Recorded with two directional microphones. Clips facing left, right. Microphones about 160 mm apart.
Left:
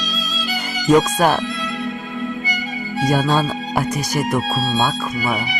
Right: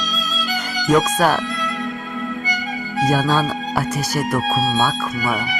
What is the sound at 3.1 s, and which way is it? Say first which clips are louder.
Speech: left 1 dB; 15° left (ahead or behind).